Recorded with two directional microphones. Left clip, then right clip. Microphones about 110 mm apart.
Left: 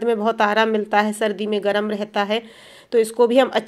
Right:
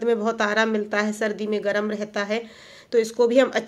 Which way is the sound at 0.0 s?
30° left (ahead or behind).